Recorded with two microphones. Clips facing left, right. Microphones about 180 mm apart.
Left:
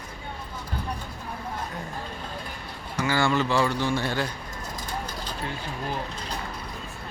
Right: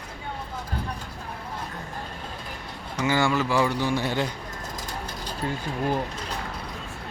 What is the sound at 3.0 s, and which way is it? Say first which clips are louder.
Speech: right 1 dB; 15° right (ahead or behind).